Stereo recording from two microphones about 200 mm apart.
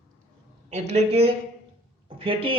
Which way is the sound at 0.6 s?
35° right (ahead or behind).